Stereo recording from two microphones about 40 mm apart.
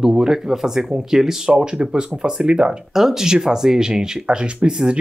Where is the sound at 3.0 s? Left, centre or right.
Centre.